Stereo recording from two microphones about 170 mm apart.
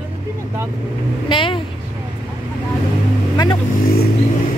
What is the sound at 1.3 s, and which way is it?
Speech, 30° left (ahead or behind).